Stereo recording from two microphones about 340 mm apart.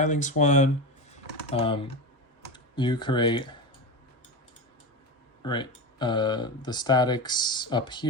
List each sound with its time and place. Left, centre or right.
0.0 s speech: left
5.4 s speech: centre